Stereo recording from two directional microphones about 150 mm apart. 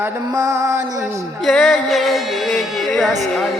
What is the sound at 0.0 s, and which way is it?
Music, 20° right (ahead or behind).